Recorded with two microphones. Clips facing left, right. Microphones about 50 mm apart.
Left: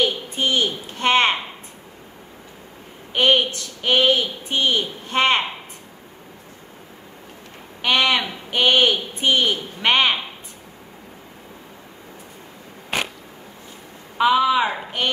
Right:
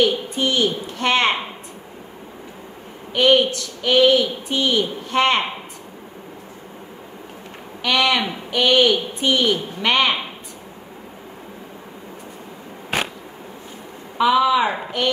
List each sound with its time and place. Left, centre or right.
0.0 s a woman's voice: left
3.1 s a woman's voice: left
7.8 s a woman's voice: left
14.1 s a woman's voice: left